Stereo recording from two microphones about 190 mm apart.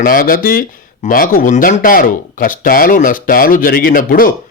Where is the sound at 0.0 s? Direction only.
45° left (ahead or behind).